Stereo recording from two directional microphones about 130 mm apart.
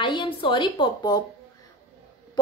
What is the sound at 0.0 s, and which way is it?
A woman's voice, 40° left (ahead or behind).